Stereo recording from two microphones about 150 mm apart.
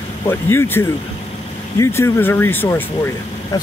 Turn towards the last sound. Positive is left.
turn(degrees=20)  # may be behind; listen again after turning